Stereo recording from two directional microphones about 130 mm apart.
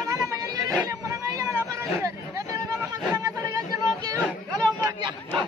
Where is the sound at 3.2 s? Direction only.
25° right (ahead or behind).